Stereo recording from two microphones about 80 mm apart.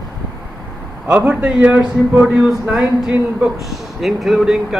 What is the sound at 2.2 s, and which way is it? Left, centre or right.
Speech, centre.